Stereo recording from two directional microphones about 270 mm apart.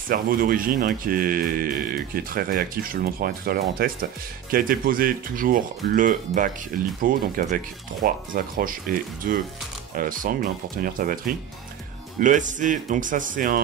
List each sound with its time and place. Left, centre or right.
0.1 s speech: right